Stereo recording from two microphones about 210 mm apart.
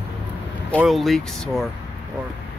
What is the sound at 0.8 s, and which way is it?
Speech, centre (ahead or behind).